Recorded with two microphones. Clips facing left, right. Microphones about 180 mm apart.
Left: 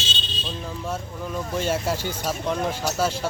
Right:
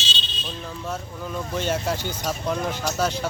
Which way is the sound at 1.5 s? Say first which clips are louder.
Left 1 dB; 5° left (ahead or behind).